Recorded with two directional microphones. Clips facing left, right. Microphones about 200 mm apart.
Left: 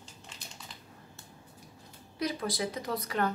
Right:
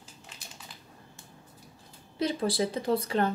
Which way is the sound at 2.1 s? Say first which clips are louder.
Right 5 dB; 30° right (ahead or behind).